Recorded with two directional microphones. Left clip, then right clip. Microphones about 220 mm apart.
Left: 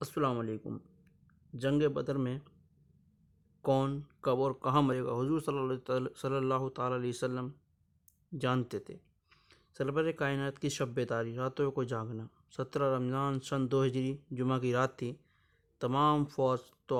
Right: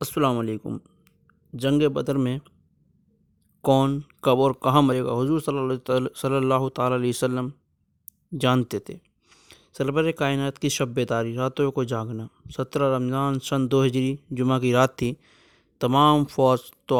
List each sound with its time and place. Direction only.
0.0 s speech: 35° right (ahead or behind)
3.6 s speech: 35° right (ahead or behind)